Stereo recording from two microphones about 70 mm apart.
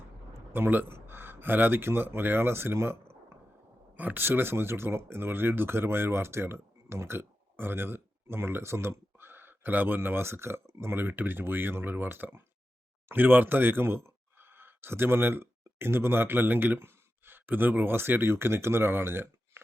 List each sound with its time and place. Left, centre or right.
0.3 s a man's voice: right
3.9 s speech: right